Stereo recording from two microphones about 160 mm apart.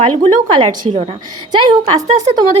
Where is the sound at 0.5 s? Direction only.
35° right (ahead or behind).